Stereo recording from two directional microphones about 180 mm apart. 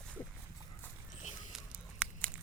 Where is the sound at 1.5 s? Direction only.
5° right (ahead or behind).